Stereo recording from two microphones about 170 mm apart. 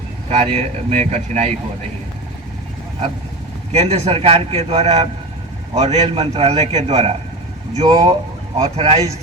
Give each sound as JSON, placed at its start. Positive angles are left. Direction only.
{"t": 0.3, "sound": "a man's voice", "side_deg": -35}
{"t": 3.7, "sound": "a man's voice", "side_deg": -40}